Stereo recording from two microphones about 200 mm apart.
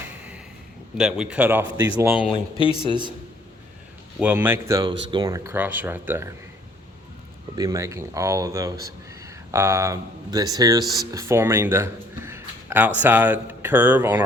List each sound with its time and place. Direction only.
0.9 s speech: centre (ahead or behind)
2.2 s speech: 25° left (ahead or behind)
4.2 s speech: 10° right (ahead or behind)
4.8 s speech: 25° right (ahead or behind)
7.5 s speech: 15° right (ahead or behind)